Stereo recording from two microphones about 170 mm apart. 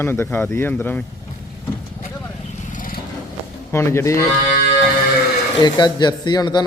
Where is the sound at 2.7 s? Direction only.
50° left (ahead or behind).